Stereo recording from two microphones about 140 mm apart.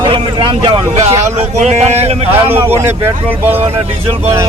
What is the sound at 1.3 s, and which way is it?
Speech, 50° right (ahead or behind).